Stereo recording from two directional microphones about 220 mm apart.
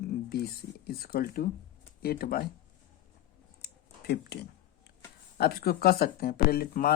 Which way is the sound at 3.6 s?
45° left (ahead or behind).